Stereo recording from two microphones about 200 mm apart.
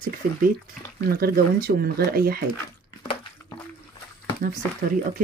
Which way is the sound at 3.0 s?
25° left (ahead or behind).